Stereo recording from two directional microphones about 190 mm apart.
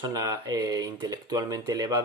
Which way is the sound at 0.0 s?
20° right (ahead or behind).